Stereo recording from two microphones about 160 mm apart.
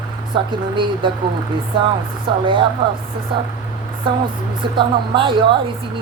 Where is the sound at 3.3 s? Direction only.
30° right (ahead or behind).